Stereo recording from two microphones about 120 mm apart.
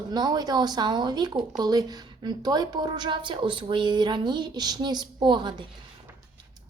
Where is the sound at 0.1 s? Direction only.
35° right (ahead or behind).